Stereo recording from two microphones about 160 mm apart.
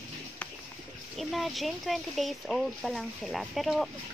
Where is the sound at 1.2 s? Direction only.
Centre (ahead or behind).